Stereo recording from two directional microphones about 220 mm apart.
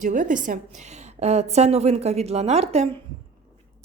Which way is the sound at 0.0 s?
35° right (ahead or behind).